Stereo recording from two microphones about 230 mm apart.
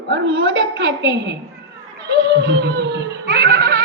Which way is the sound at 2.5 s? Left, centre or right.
Right.